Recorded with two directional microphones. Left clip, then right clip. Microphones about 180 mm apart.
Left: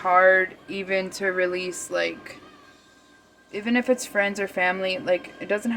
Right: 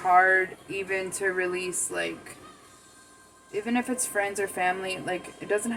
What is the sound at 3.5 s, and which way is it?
A woman's voice, 60° left (ahead or behind).